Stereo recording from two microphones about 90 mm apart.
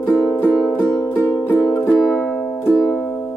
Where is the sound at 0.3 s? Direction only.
20° left (ahead or behind).